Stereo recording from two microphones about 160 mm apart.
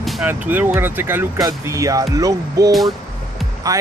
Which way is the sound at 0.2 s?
10° right (ahead or behind).